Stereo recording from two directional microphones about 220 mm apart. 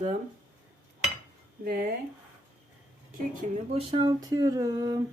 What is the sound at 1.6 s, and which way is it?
Speech, 40° right (ahead or behind).